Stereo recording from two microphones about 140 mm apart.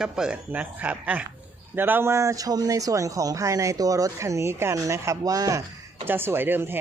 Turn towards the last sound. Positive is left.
turn(degrees=-15)  # may be behind; listen again after turning